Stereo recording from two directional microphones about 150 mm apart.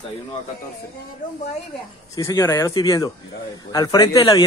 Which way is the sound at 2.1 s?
20° left (ahead or behind).